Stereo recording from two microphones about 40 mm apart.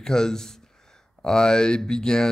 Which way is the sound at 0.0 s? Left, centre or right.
Centre.